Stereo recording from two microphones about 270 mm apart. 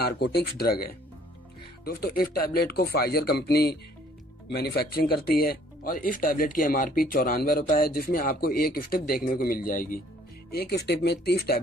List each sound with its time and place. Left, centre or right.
0.0 s speech: left